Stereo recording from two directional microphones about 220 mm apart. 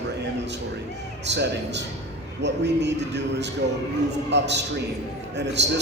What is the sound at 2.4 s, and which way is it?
Speech, 50° right (ahead or behind).